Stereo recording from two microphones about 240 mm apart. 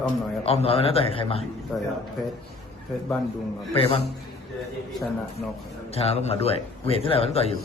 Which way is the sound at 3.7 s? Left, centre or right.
Left.